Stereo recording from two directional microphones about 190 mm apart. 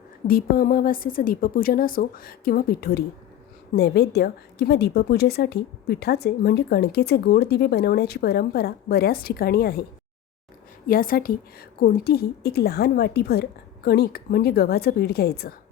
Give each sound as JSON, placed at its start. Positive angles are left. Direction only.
{"t": 0.3, "sound": "a woman's voice", "side_deg": 50}
{"t": 10.8, "sound": "a woman's voice", "side_deg": 50}